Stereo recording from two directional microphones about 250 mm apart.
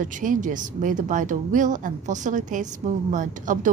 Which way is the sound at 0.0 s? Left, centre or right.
Right.